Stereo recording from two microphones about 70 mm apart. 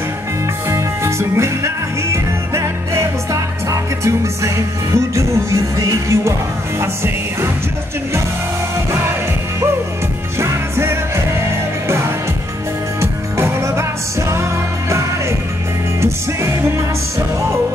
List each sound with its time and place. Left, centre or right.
0.7 s music: right
10.4 s music: right